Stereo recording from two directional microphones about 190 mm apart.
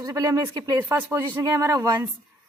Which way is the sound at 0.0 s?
15° right (ahead or behind).